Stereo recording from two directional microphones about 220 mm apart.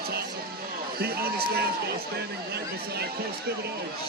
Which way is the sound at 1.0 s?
45° right (ahead or behind).